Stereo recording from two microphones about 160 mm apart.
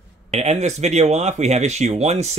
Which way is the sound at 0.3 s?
45° right (ahead or behind).